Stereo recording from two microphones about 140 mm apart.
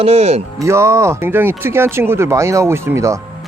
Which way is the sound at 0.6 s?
20° right (ahead or behind).